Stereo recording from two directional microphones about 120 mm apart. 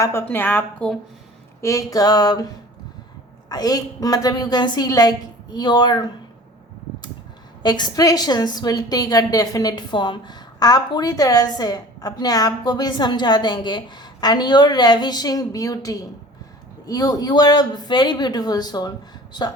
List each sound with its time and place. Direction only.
0.0 s a woman's voice: 20° left (ahead or behind)
1.6 s a woman's voice: 30° left (ahead or behind)
3.5 s a woman's voice: 30° left (ahead or behind)
7.6 s a woman's voice: 35° left (ahead or behind)